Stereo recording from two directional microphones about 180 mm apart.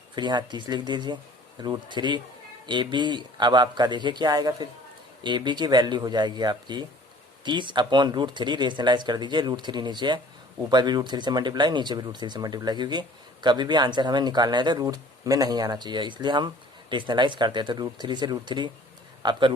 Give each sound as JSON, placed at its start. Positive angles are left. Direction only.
{"t": 0.2, "sound": "speech", "side_deg": -25}